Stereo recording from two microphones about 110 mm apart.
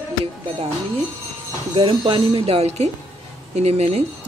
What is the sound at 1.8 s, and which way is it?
A woman's voice, 55° right (ahead or behind).